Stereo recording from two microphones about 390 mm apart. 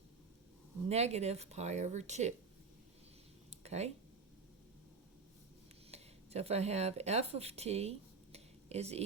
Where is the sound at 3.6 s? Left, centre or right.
Centre.